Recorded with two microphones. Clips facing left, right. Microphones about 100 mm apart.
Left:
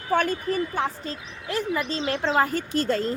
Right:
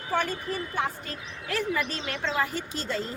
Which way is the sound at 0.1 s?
50° left (ahead or behind).